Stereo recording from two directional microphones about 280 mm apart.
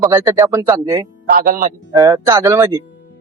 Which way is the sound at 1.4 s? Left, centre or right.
Right.